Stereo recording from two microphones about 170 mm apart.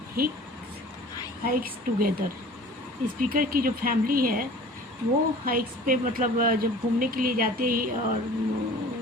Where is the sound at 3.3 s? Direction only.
60° right (ahead or behind).